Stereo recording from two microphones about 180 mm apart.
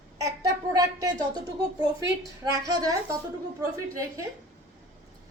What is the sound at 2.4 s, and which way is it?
A woman's voice, 20° right (ahead or behind).